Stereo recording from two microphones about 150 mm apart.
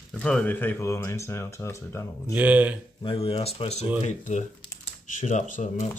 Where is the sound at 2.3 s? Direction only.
10° right (ahead or behind).